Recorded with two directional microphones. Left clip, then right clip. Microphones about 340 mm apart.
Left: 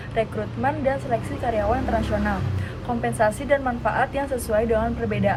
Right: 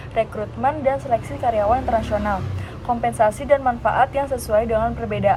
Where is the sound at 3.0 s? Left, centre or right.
Centre.